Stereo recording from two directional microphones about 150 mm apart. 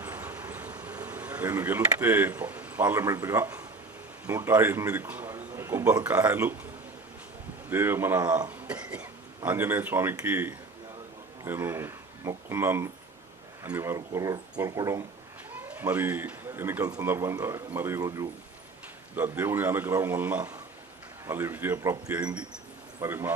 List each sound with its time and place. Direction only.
0.0 s bee: 10° right (ahead or behind)
4.3 s a man's voice: 15° right (ahead or behind)
7.7 s speech: 15° right (ahead or behind)
15.5 s speech: 10° right (ahead or behind)